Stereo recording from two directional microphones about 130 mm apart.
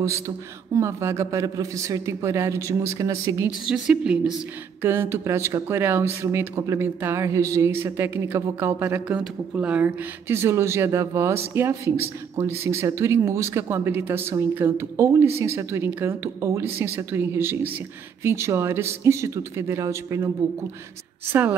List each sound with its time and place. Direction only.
0.7 s speech: 20° right (ahead or behind)
3.6 s a woman's voice: 5° right (ahead or behind)
4.8 s speech: 15° right (ahead or behind)
21.3 s a woman's voice: 15° right (ahead or behind)